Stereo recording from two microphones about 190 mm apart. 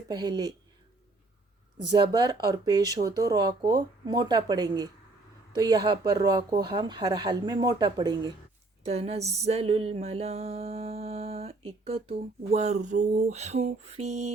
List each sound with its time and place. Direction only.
0.1 s speech: 20° right (ahead or behind)
1.9 s speech: 20° right (ahead or behind)
8.8 s a sound: 30° right (ahead or behind)